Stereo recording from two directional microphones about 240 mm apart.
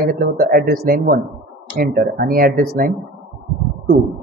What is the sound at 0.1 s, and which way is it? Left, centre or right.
A man's voice, right.